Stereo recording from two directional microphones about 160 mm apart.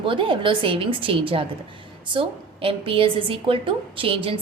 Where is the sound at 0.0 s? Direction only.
30° right (ahead or behind).